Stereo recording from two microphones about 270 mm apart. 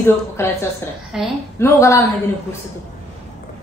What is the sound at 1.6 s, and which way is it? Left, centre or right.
Speech, centre.